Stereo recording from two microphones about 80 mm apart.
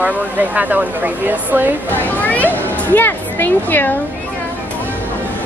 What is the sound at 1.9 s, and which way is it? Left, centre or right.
A woman's voice, centre.